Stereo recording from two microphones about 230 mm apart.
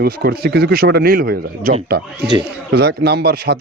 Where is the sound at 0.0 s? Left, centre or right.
Right.